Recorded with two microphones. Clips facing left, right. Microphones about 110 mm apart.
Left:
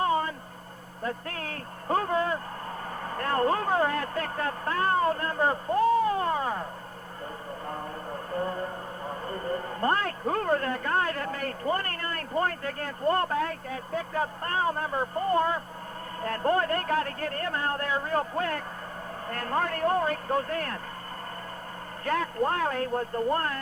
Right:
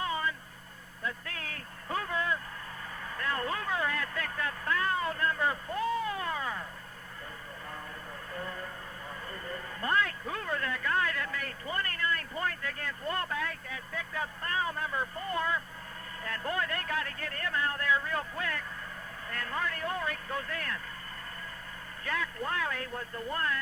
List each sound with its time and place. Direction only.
0.0 s a sound: 40° left (ahead or behind)
1.0 s a man's voice: 40° left (ahead or behind)
7.7 s a man's voice: 40° left (ahead or behind)
22.0 s a man's voice: 45° left (ahead or behind)